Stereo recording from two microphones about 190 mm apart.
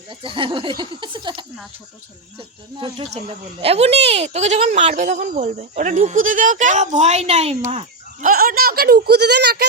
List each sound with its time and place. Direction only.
0.1 s speech: 25° right (ahead or behind)
2.7 s speech: 25° right (ahead or behind)
8.3 s speech: 50° right (ahead or behind)